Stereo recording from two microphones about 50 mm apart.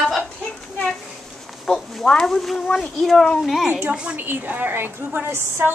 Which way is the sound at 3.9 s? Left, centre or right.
Right.